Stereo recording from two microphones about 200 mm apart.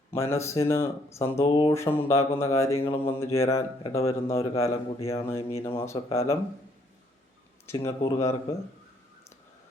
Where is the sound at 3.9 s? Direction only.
15° left (ahead or behind).